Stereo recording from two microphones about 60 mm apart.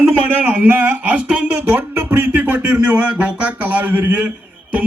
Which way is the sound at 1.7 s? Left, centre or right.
Right.